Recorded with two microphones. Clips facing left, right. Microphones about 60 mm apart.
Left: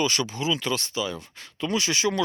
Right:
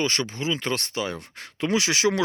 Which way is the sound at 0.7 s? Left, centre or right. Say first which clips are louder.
Even; right.